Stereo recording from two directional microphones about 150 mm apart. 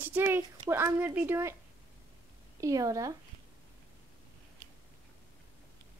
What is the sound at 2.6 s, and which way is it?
Speech, 20° right (ahead or behind).